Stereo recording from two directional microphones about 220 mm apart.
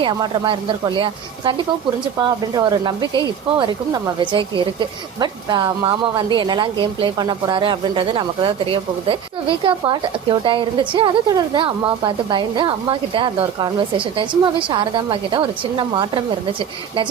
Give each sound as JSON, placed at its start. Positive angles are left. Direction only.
{"t": 0.0, "sound": "speech", "side_deg": -20}